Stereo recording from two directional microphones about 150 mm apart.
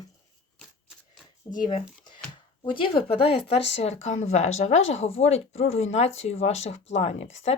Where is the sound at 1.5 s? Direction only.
25° left (ahead or behind).